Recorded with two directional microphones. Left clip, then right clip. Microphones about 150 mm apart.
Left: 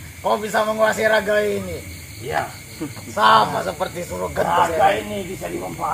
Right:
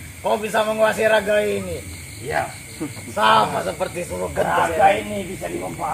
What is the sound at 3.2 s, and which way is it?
Speech, 30° right (ahead or behind).